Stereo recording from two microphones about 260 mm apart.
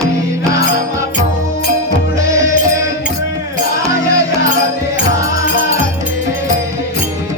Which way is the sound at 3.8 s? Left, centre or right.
Centre.